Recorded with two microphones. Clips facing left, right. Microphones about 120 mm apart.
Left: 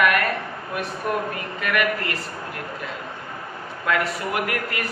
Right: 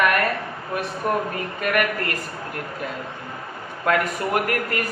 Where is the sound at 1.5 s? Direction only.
45° right (ahead or behind).